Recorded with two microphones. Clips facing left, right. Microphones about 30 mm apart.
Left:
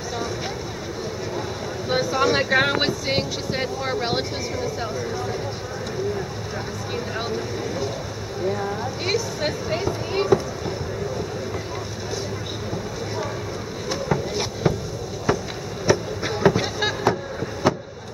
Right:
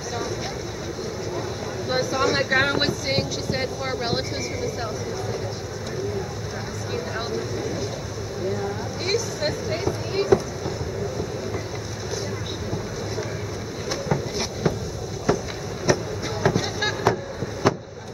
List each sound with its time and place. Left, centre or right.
1.9 s speech: centre
8.5 s speech: centre
14.0 s a sound: centre
15.9 s basketball bounce: left
16.4 s a sound: left
16.8 s vehicle: centre